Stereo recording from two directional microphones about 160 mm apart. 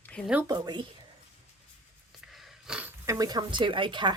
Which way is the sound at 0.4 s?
25° right (ahead or behind).